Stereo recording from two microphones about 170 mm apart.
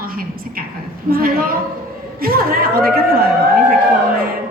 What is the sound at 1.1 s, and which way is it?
A woman's voice, 60° right (ahead or behind).